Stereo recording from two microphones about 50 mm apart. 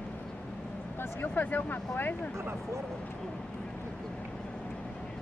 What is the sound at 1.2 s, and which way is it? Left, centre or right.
Speech, left.